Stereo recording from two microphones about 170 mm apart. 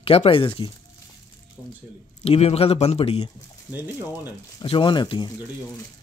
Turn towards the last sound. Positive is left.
turn(degrees=25)  # may be behind; listen again after turning